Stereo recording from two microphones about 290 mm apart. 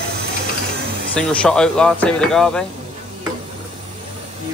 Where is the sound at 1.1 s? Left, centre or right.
Centre.